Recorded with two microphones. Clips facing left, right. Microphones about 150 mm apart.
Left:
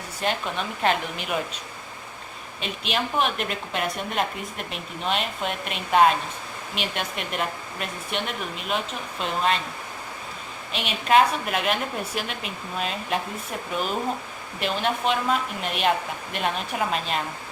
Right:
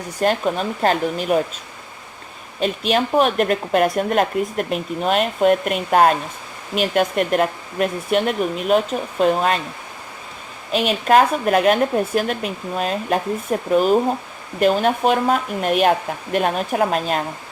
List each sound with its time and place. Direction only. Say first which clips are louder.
0.2 s a woman's voice: right 8 dB; 40° right (ahead or behind)
2.6 s speech: right 9 dB; 45° right (ahead or behind)
10.7 s speech: right 6 dB; 45° right (ahead or behind)